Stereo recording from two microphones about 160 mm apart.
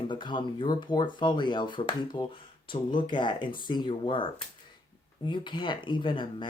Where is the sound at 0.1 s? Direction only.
30° left (ahead or behind).